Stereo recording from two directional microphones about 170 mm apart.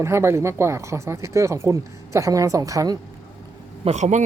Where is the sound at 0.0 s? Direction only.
15° right (ahead or behind).